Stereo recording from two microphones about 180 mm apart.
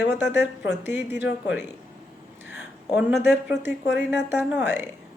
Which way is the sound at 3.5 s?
75° left (ahead or behind).